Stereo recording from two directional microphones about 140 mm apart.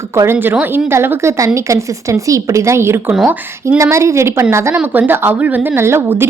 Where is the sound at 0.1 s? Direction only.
15° right (ahead or behind).